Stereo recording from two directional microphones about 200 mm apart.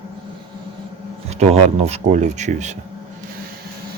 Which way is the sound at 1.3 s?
35° right (ahead or behind).